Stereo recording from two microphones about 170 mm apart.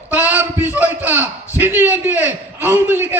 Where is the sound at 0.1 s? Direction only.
10° right (ahead or behind).